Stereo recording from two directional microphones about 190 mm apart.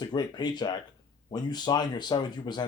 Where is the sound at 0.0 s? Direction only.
20° left (ahead or behind).